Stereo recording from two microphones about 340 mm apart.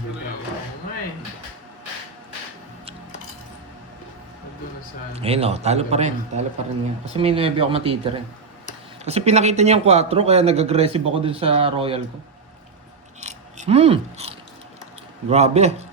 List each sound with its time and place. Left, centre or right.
5.1 s a man's voice: centre
13.1 s mechanisms: centre
15.3 s a man's voice: centre